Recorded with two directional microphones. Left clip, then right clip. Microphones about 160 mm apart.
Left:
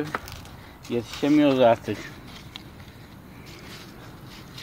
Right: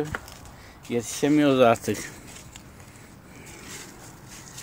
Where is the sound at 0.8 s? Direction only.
45° right (ahead or behind).